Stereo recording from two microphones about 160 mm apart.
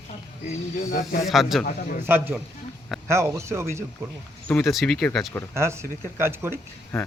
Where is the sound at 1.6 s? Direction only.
55° left (ahead or behind).